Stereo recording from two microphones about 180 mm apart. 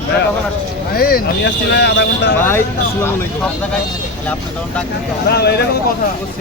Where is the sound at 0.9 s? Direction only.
55° left (ahead or behind); by 2.3 s 75° left (ahead or behind).